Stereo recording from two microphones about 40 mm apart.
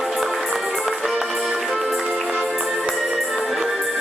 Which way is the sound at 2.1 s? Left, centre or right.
Centre.